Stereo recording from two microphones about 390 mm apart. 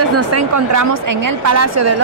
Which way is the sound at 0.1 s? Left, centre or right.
Right.